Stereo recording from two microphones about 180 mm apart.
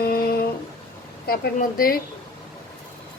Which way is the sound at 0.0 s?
55° left (ahead or behind).